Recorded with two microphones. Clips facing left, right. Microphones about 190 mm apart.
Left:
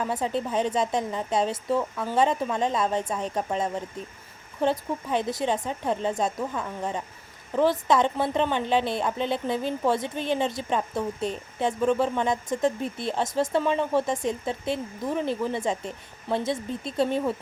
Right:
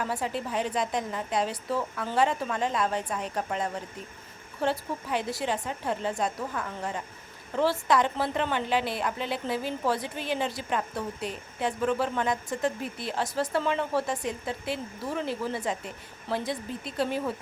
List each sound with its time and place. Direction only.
0.0 s a woman's voice: 20° left (ahead or behind)